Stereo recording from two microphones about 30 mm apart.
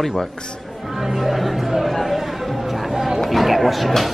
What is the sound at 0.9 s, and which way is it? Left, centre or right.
Chatter, centre.